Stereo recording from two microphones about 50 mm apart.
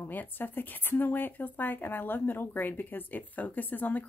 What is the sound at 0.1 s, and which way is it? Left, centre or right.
Speech, left.